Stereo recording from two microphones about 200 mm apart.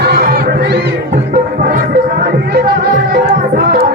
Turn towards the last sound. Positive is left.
turn(degrees=-45)  # may be behind; listen again after turning